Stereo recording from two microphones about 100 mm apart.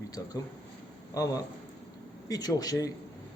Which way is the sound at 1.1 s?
35° left (ahead or behind).